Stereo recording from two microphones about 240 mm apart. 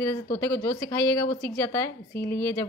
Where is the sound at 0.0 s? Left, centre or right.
Centre.